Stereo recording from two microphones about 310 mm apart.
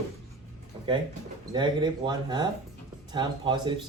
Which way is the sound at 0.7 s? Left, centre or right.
Centre.